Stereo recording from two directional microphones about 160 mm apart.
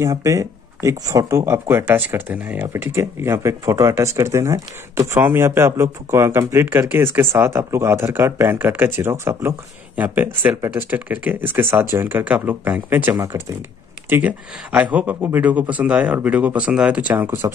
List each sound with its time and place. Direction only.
0.0 s speech: 20° right (ahead or behind)